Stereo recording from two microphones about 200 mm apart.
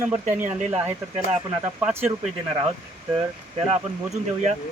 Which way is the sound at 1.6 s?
10° right (ahead or behind).